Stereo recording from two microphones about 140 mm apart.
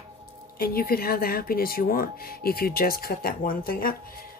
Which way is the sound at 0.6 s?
90° left.